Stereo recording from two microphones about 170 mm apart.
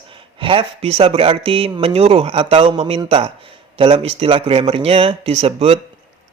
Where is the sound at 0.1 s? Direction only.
30° right (ahead or behind).